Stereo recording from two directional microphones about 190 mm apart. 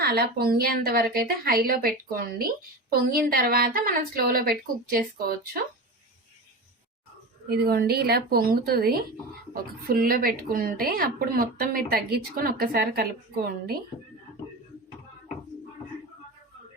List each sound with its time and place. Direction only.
0.0 s a woman's voice: 55° right (ahead or behind)
7.4 s a woman's voice: 55° right (ahead or behind)